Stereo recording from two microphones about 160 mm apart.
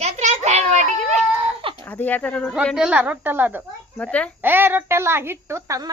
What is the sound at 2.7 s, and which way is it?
Speech, 5° right (ahead or behind).